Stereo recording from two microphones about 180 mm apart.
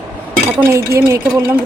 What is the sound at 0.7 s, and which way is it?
Speech, 15° right (ahead or behind).